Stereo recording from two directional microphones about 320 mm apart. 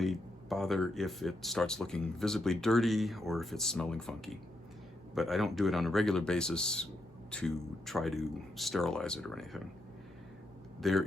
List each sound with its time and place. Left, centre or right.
0.0 s speech: centre
10.8 s speech: centre